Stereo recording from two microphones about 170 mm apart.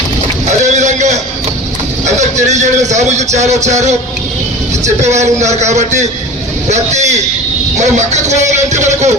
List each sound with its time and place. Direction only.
0.6 s a sound: 45° right (ahead or behind)
2.0 s a man's voice: 45° right (ahead or behind)
5.0 s a man's voice: 45° right (ahead or behind)